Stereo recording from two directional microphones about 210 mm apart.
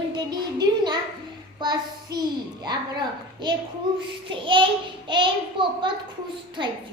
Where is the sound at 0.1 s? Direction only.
20° right (ahead or behind).